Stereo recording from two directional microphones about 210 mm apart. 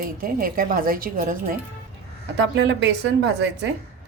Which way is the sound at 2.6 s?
55° right (ahead or behind).